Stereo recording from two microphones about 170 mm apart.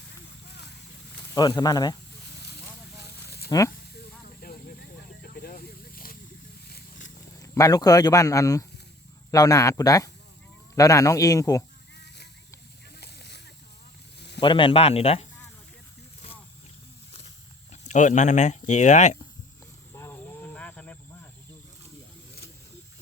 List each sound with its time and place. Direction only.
1.3 s speech: 25° left (ahead or behind)
3.0 s snake: 70° left (ahead or behind)
4.4 s a sound: 60° left (ahead or behind)
5.2 s snake: 60° left (ahead or behind)
7.3 s speech: 20° left (ahead or behind)
11.9 s a sound: 80° left
14.2 s snake: 80° left
14.4 s speech: 30° left (ahead or behind)
17.1 s a sound: 40° left (ahead or behind)
19.9 s wild animals: 15° left (ahead or behind)